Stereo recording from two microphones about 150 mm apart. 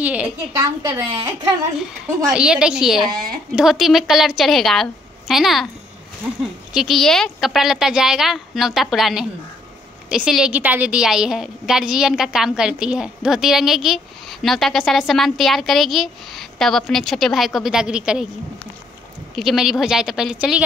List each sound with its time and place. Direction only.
0.0 s a woman's voice: 10° right (ahead or behind)
0.6 s a woman's voice: 20° right (ahead or behind)
2.3 s a woman's voice: 5° right (ahead or behind)
6.7 s a woman's voice: centre (ahead or behind)
19.3 s a woman's voice: centre (ahead or behind)